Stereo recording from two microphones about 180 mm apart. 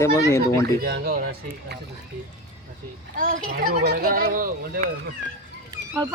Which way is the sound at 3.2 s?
50° right (ahead or behind).